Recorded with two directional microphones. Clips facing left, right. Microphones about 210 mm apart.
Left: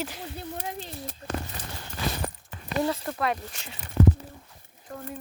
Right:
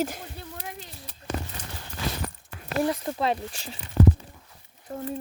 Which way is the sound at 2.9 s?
20° right (ahead or behind).